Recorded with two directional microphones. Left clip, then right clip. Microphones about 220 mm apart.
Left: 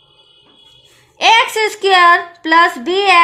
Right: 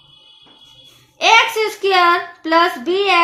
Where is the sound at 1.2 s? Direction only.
50° left (ahead or behind).